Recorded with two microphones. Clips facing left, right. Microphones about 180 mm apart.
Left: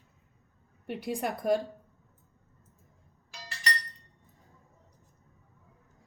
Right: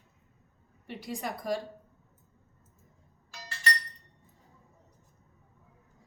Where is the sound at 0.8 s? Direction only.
55° left (ahead or behind).